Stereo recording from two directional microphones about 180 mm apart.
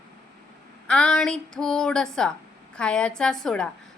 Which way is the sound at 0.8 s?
5° left (ahead or behind).